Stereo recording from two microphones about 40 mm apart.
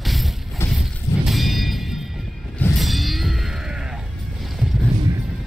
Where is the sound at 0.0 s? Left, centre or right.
Centre.